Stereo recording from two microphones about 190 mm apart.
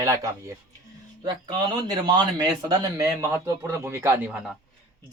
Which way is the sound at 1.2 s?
20° right (ahead or behind).